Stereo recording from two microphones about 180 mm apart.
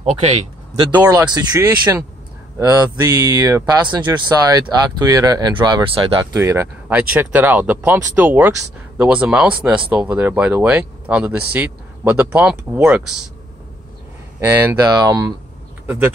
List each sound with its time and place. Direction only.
1.0 s speech: 20° right (ahead or behind)
6.3 s speech: 15° right (ahead or behind)
14.4 s speech: 15° right (ahead or behind)